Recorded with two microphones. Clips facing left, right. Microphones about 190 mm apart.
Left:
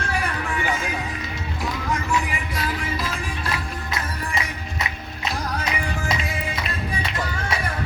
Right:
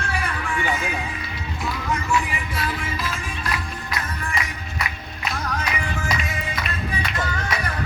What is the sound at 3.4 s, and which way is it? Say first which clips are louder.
Music: left 1 dB; 25° left (ahead or behind).